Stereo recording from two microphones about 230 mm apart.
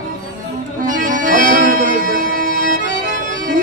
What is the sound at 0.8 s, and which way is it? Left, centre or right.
Music, right.